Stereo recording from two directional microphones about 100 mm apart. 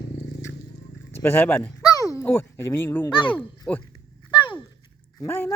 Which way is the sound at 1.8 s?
35° left (ahead or behind).